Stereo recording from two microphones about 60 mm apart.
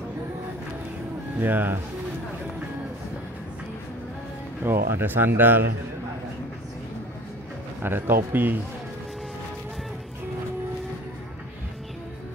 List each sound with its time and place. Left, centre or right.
1.4 s speech: right
4.6 s speech: right
7.8 s speech: right